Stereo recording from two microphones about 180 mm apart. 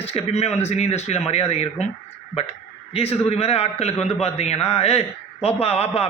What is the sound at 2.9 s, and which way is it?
A man's voice, 35° left (ahead or behind).